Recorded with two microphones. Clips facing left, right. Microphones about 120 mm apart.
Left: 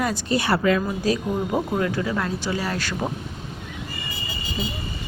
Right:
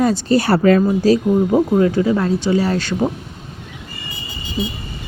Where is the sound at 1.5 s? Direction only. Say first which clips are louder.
Right 8 dB; 25° right (ahead or behind).